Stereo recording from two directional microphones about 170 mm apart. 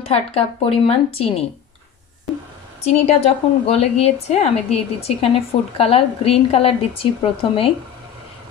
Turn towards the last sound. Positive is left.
turn(degrees=35)  # may be behind; listen again after turning